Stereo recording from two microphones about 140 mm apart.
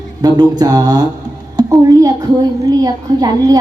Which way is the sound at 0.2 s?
30° right (ahead or behind).